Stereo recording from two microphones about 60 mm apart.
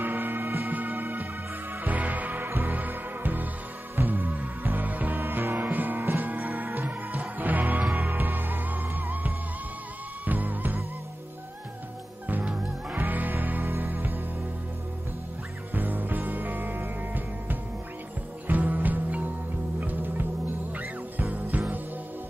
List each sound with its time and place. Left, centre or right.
0.0 s music: right
12.3 s music: right
15.7 s music: right